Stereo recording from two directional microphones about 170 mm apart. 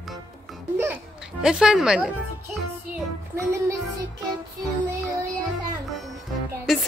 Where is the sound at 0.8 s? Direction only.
10° right (ahead or behind).